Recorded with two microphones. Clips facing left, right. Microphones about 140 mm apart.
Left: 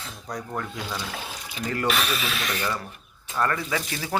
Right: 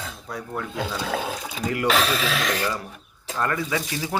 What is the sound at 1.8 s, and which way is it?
Speech, 90° right.